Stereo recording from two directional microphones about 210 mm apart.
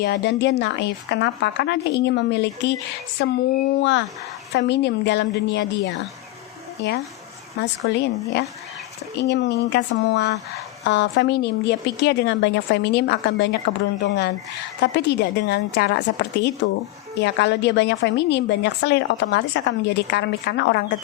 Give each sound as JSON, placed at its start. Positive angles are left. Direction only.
{"t": 0.0, "sound": "a woman's voice", "side_deg": 55}
{"t": 7.6, "sound": "a woman's voice", "side_deg": 55}